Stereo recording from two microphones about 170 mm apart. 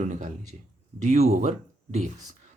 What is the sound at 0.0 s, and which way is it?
Speech, 45° right (ahead or behind).